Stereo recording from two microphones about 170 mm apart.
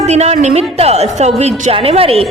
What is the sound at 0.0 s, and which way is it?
A woman's voice, 40° right (ahead or behind).